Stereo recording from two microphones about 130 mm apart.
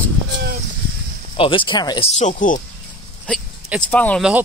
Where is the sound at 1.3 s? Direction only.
45° left (ahead or behind).